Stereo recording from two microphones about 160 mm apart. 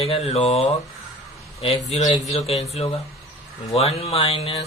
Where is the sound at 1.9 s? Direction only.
45° left (ahead or behind).